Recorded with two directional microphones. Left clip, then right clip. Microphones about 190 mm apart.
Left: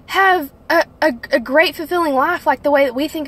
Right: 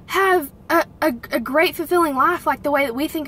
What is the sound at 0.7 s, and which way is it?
A woman's voice, 10° right (ahead or behind).